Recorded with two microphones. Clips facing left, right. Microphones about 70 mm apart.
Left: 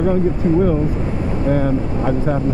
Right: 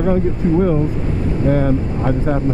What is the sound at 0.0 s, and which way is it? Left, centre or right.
Speech, centre.